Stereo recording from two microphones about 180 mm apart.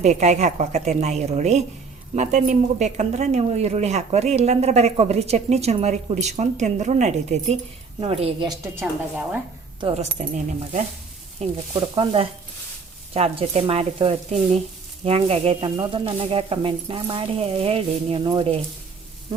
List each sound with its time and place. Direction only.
0.0 s speech: 40° right (ahead or behind)
8.6 s speech: 15° right (ahead or behind)
9.8 s speech: 35° right (ahead or behind)
11.3 s speech: 30° right (ahead or behind)